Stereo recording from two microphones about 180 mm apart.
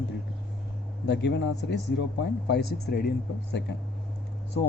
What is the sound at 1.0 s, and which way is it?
Speech, 75° left (ahead or behind).